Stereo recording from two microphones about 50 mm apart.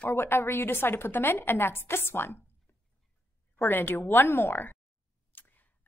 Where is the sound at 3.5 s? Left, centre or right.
Left.